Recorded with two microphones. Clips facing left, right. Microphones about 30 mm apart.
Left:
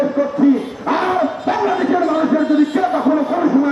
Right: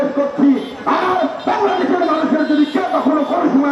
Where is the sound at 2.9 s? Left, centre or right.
Right.